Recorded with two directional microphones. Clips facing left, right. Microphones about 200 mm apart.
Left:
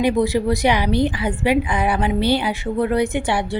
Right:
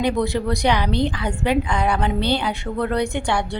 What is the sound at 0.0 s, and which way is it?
A woman's voice, 10° left (ahead or behind).